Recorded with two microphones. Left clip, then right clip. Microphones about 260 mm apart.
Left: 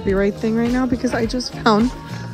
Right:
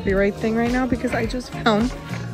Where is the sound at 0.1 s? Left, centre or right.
Centre.